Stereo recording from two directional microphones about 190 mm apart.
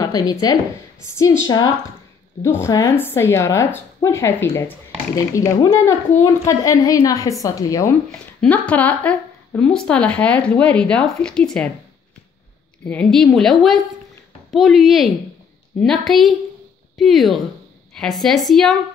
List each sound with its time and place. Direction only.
0.0 s speech: 20° left (ahead or behind)
2.4 s speech: 15° left (ahead or behind)
8.4 s speech: 5° left (ahead or behind)
12.8 s speech: 5° left (ahead or behind)